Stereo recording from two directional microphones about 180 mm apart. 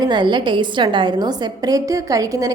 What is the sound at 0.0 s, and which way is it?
A woman's voice, 25° right (ahead or behind).